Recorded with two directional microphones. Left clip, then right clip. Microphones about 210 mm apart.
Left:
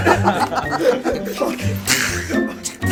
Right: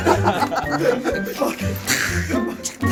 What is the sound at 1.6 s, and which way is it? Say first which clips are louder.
Speech: left 2 dB; 25° left (ahead or behind).